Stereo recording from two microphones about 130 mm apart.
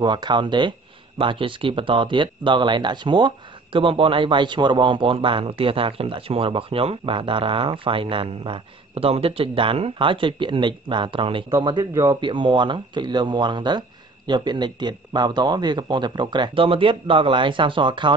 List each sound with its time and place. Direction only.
0.0 s speech: 35° right (ahead or behind)